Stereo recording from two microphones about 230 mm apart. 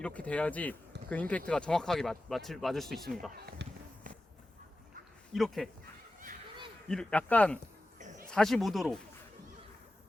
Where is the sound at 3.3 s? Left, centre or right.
Right.